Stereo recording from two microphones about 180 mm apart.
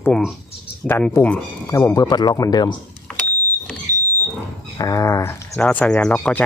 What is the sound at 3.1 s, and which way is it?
Vehicle, 5° left (ahead or behind).